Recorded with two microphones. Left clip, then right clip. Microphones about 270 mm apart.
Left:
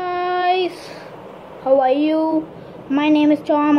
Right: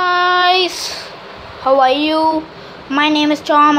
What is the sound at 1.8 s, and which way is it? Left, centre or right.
Speech, centre.